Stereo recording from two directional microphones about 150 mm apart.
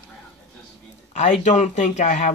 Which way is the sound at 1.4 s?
55° left (ahead or behind).